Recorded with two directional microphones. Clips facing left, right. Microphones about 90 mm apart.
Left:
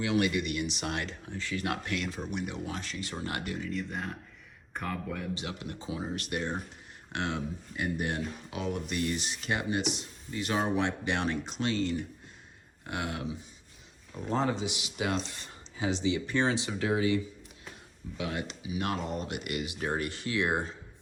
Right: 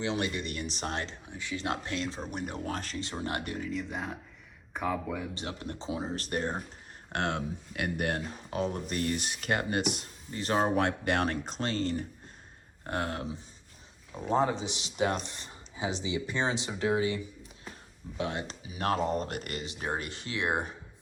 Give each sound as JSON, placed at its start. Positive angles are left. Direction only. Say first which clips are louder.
{"t": 0.0, "sound": "speech", "louder": "left 3 dB", "side_deg": -30}
{"t": 1.3, "sound": "speech", "louder": "left 1 dB", "side_deg": -20}
{"t": 3.0, "sound": "speech", "louder": "right 1 dB", "side_deg": -25}
{"t": 3.6, "sound": "speech", "louder": "even", "side_deg": 0}
{"t": 5.8, "sound": "speech", "louder": "right 2 dB", "side_deg": -25}
{"t": 6.1, "sound": "speech", "louder": "right 1 dB", "side_deg": -35}
{"t": 7.1, "sound": "speech", "louder": "right 2 dB", "side_deg": -50}
{"t": 8.1, "sound": "speech", "louder": "right 1 dB", "side_deg": -40}
{"t": 10.3, "sound": "speech", "louder": "right 2 dB", "side_deg": -40}
{"t": 14.3, "sound": "speech", "louder": "right 3 dB", "side_deg": -15}
{"t": 15.3, "sound": "a sound", "louder": "even", "side_deg": -20}
{"t": 16.0, "sound": "speech", "louder": "left 3 dB", "side_deg": -15}
{"t": 18.2, "sound": "speech", "louder": "right 1 dB", "side_deg": -30}
{"t": 19.8, "sound": "speech", "louder": "left 1 dB", "side_deg": -25}